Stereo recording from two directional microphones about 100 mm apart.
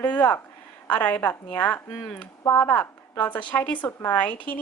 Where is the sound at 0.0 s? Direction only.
15° left (ahead or behind).